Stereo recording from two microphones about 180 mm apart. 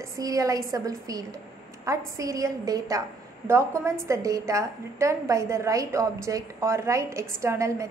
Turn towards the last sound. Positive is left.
turn(degrees=-15)  # may be behind; listen again after turning